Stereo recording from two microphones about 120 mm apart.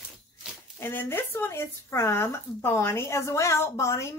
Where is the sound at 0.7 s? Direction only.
20° left (ahead or behind).